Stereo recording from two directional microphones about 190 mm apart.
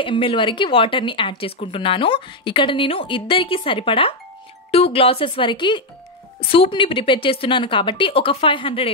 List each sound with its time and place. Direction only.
0.0 s speech: 25° left (ahead or behind)